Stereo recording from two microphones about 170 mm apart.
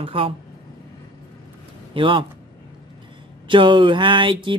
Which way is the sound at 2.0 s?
30° right (ahead or behind).